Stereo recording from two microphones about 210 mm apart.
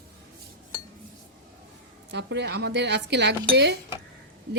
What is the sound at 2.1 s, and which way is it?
Speech, 55° right (ahead or behind).